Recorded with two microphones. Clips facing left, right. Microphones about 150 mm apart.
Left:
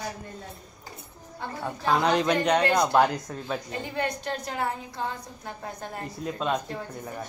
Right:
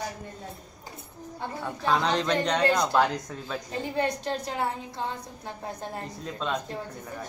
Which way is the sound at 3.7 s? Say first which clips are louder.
Right 6 dB; 30° right (ahead or behind).